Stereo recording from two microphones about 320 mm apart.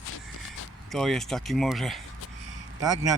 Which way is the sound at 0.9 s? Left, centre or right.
Centre.